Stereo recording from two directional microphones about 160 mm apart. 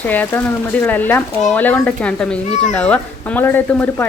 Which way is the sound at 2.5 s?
50° left (ahead or behind).